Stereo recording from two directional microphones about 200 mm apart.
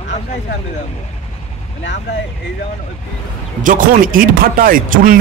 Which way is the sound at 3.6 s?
45° right (ahead or behind).